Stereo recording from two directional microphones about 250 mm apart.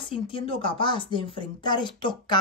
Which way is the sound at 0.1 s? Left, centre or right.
Left.